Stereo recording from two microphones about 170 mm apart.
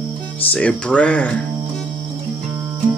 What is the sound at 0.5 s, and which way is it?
Speech, 5° left (ahead or behind).